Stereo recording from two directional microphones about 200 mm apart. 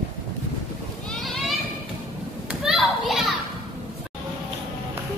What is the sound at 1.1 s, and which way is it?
Children playing, centre (ahead or behind).